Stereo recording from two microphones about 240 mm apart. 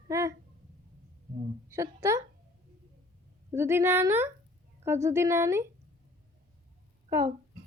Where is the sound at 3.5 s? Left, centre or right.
Centre.